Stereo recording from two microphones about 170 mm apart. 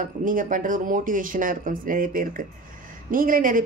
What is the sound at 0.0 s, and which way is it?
Speech, 50° right (ahead or behind).